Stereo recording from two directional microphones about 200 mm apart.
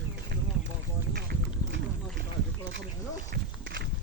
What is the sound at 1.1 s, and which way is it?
Boat, 55° right (ahead or behind).